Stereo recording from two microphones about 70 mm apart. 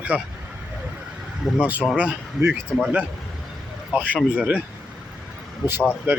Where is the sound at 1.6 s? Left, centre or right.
Right.